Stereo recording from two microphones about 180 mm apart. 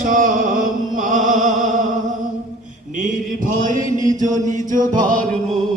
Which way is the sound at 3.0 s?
45° right (ahead or behind).